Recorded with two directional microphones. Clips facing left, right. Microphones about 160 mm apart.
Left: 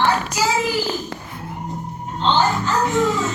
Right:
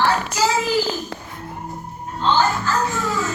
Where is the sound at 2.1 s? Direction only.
20° left (ahead or behind).